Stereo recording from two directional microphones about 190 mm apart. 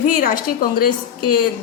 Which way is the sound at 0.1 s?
45° left (ahead or behind).